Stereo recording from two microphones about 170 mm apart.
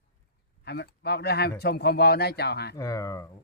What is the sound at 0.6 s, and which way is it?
A man's voice, 70° left (ahead or behind).